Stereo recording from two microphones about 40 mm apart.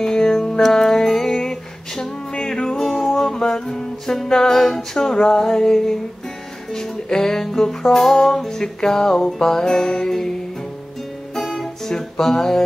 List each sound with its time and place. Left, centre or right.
0.0 s music: centre
3.3 s music: centre
11.3 s music: centre